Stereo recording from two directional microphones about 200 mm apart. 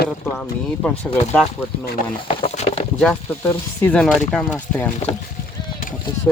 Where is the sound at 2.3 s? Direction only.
30° left (ahead or behind).